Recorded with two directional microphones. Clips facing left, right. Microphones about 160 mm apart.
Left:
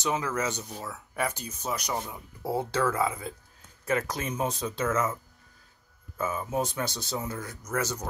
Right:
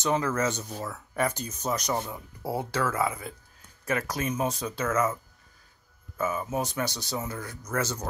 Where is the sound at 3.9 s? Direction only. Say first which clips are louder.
Even; 25° left (ahead or behind).